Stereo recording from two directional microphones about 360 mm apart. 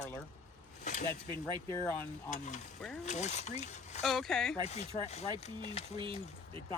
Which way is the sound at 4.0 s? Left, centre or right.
Centre.